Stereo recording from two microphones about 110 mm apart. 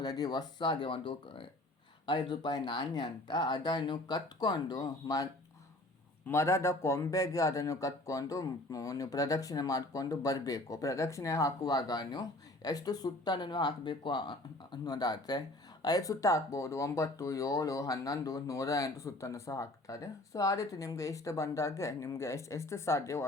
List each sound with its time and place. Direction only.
0.0 s speech: 35° left (ahead or behind)